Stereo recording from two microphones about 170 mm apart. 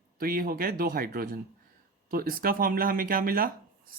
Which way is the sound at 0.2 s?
60° right (ahead or behind).